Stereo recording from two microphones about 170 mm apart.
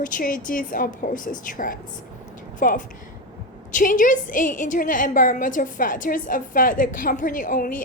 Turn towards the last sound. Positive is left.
turn(degrees=55)  # may be behind; listen again after turning